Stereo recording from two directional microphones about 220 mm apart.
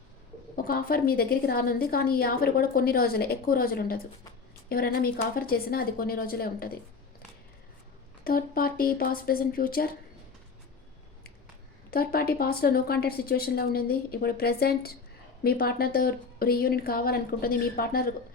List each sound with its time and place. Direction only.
0.5 s a woman's voice: 40° left (ahead or behind)
8.2 s speech: 40° left (ahead or behind)
11.9 s a woman's voice: 45° left (ahead or behind)